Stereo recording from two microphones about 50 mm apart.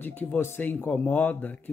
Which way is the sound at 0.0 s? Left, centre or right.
Left.